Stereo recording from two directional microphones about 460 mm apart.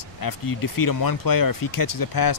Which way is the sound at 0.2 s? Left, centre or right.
Left.